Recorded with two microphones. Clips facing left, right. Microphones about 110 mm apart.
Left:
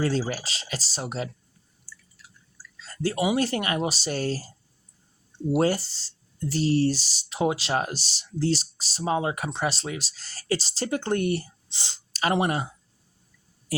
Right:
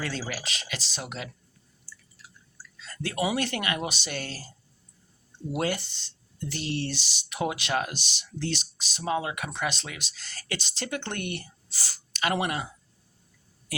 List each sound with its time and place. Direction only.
0.0 s speech: 35° left (ahead or behind)
2.7 s speech: 30° left (ahead or behind)
5.5 s speech: 35° left (ahead or behind)
11.7 s speech: 25° left (ahead or behind)